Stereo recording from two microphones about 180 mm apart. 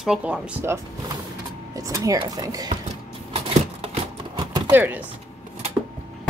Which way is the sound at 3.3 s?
35° right (ahead or behind).